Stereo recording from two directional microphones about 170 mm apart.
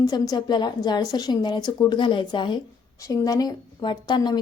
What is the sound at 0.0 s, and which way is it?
A woman's voice, 20° left (ahead or behind).